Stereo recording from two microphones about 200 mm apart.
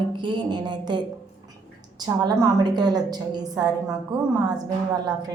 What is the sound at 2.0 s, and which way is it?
A woman's voice, 20° right (ahead or behind).